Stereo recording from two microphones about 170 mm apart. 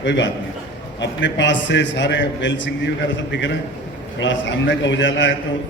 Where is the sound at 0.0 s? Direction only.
90° left.